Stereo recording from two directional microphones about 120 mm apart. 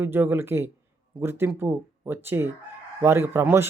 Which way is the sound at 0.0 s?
20° right (ahead or behind).